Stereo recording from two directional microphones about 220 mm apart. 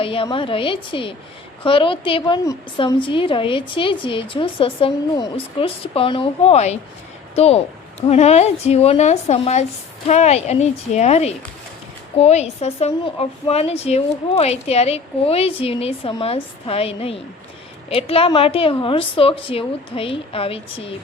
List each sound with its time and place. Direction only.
0.0 s a woman's voice: 25° left (ahead or behind)